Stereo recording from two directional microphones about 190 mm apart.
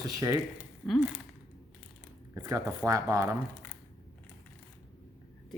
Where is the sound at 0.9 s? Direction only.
5° right (ahead or behind).